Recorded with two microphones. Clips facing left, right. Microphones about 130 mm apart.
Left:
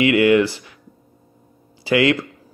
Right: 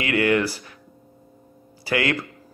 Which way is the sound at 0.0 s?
20° left (ahead or behind).